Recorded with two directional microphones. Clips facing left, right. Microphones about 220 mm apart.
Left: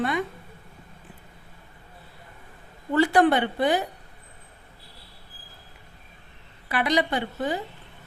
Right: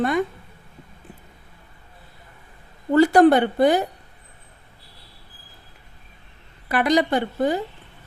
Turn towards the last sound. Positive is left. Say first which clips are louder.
# right 6 dB
turn(degrees=-45)  # may be behind; listen again after turning